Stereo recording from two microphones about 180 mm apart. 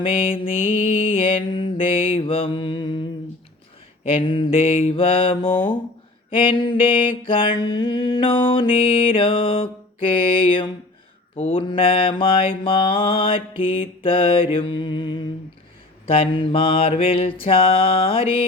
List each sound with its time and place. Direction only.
0.0 s mantra: 30° left (ahead or behind)
4.1 s mantra: 30° left (ahead or behind)
16.3 s mantra: 30° left (ahead or behind)